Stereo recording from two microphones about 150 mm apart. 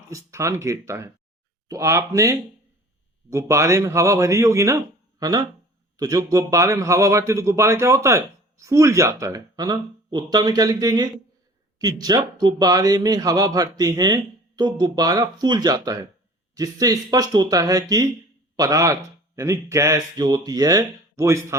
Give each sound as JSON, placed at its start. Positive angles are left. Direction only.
{"t": 0.1, "sound": "a man's voice", "side_deg": -20}
{"t": 6.0, "sound": "a man's voice", "side_deg": -25}